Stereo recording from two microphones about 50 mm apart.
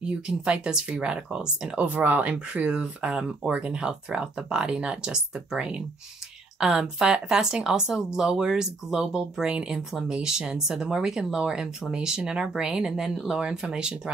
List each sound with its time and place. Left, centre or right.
0.5 s speech: centre
1.9 s speech: right; by 13.4 s centre
13.4 s speech: centre